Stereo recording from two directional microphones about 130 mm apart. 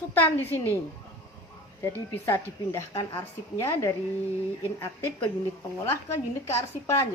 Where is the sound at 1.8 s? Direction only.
20° left (ahead or behind).